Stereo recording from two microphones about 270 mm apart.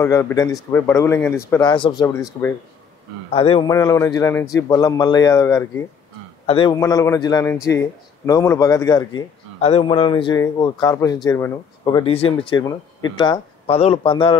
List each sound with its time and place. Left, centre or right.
0.0 s speech: centre
3.3 s speech: left